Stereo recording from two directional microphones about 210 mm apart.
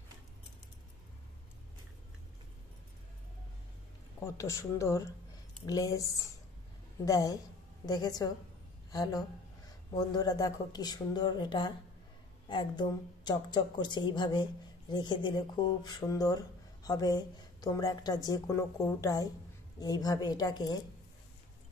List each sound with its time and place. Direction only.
4.2 s speech: 15° left (ahead or behind)
7.1 s a woman's voice: 15° left (ahead or behind)